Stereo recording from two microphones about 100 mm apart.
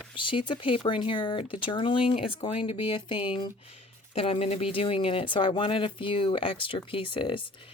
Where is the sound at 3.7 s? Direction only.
80° left.